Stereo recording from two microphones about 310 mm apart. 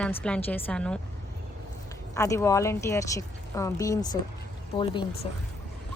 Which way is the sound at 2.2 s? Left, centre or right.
Centre.